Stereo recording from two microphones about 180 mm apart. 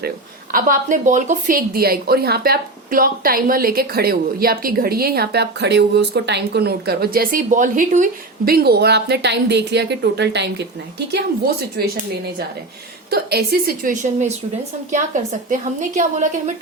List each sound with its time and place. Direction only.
0.5 s a woman's voice: 50° right (ahead or behind)
8.4 s a woman's voice: 60° right (ahead or behind)
11.8 s a woman's voice: 60° right (ahead or behind)
13.1 s a woman's voice: 60° right (ahead or behind); by 15.5 s 45° right (ahead or behind)